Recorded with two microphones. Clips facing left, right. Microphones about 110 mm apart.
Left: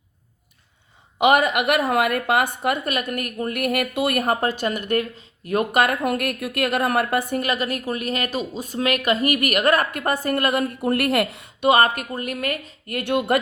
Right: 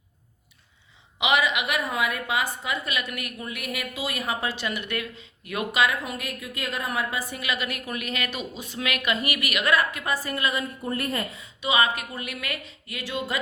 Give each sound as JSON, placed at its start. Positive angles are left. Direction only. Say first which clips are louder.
{"t": 1.2, "sound": "a woman's voice", "louder": "left 7 dB", "side_deg": 50}